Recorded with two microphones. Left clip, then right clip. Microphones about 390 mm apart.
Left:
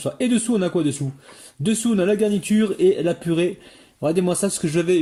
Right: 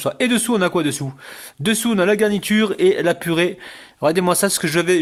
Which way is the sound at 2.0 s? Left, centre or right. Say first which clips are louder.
Right 3 dB; centre.